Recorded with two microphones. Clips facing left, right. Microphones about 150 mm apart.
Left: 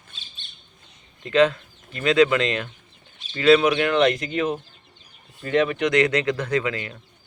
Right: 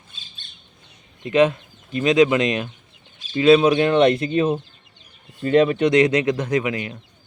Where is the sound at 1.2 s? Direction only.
20° right (ahead or behind).